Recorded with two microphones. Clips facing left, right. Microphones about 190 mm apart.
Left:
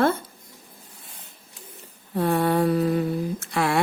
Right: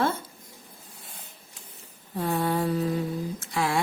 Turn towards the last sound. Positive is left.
turn(degrees=65)  # may be behind; listen again after turning